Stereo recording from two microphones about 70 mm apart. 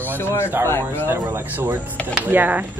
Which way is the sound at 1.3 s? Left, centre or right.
Right.